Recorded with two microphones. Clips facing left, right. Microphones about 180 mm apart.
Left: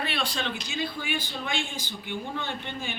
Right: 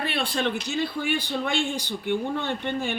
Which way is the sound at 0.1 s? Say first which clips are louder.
Right 5 dB; 55° right (ahead or behind).